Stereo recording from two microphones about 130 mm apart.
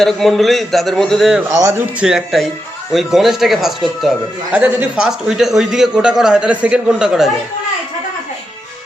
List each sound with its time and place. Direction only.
0.0 s a man's voice: centre (ahead or behind)
1.5 s a man's voice: 25° right (ahead or behind)
2.0 s a man's voice: 5° right (ahead or behind)
4.5 s speech: 15° right (ahead or behind)
4.9 s a man's voice: 5° right (ahead or behind)